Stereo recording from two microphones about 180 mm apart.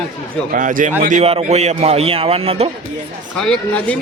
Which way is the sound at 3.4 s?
5° left (ahead or behind).